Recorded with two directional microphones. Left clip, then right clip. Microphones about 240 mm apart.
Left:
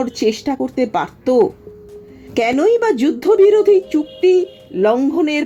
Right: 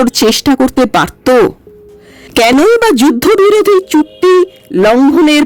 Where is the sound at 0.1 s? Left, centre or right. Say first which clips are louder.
Right 9 dB; right.